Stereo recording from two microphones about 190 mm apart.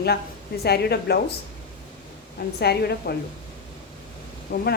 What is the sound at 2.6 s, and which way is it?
Speech, 60° left (ahead or behind).